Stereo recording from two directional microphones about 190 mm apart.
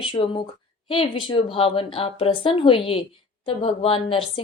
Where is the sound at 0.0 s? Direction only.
25° left (ahead or behind).